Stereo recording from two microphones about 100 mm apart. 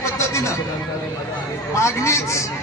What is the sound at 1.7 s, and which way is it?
Speech, 30° left (ahead or behind).